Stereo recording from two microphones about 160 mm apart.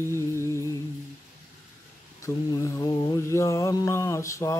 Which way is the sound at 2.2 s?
20° left (ahead or behind).